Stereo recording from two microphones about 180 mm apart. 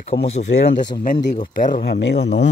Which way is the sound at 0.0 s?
35° left (ahead or behind).